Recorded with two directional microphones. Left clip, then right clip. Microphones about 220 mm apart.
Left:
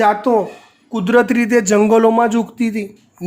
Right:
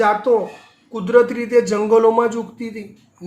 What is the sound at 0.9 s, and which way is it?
Speech, 50° left (ahead or behind).